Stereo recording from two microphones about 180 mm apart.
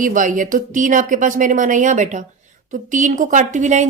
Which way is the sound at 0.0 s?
45° right (ahead or behind).